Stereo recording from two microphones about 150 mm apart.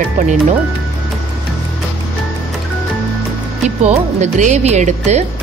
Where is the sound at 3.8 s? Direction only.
50° right (ahead or behind).